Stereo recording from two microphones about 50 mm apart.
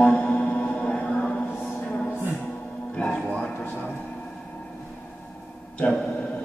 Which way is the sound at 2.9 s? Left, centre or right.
Left.